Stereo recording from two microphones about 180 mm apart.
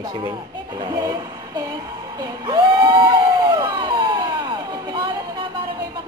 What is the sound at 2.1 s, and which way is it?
Crowd, 20° right (ahead or behind).